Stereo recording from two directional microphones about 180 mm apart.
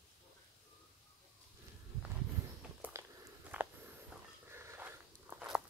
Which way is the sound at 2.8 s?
10° right (ahead or behind).